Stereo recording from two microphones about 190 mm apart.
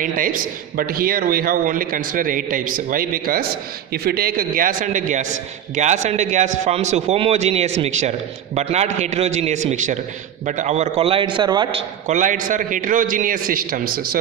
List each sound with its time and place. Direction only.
0.0 s a man's voice: 45° right (ahead or behind); by 11.8 s 25° right (ahead or behind)
12.1 s a man's voice: 40° right (ahead or behind)